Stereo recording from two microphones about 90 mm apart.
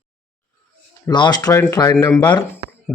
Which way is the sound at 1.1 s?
55° left (ahead or behind).